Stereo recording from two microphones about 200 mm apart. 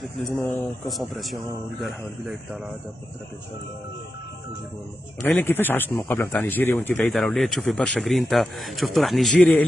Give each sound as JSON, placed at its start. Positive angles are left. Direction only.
{"t": 0.0, "sound": "speech", "side_deg": 0}
{"t": 5.2, "sound": "speech", "side_deg": 10}